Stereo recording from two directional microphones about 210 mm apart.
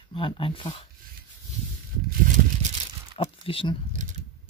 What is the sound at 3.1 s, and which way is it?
Speech, 25° left (ahead or behind).